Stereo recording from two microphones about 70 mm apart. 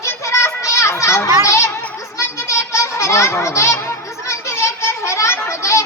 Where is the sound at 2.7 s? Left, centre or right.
Left.